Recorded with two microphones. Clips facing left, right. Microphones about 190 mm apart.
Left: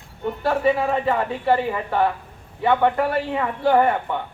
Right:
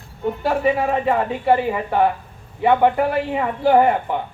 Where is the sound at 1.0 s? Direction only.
20° right (ahead or behind).